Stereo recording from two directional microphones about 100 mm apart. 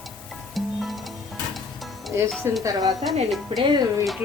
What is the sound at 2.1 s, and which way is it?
Speech, 25° right (ahead or behind).